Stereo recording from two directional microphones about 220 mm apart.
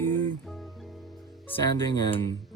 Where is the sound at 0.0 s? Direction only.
10° left (ahead or behind).